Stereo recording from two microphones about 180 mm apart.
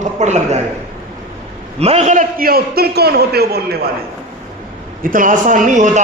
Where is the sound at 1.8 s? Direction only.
35° right (ahead or behind); by 3.9 s 60° right (ahead or behind).